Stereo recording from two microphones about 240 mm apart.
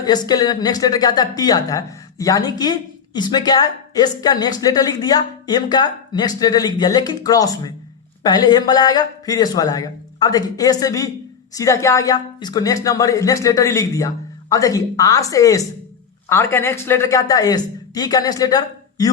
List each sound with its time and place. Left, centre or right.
0.0 s speech: centre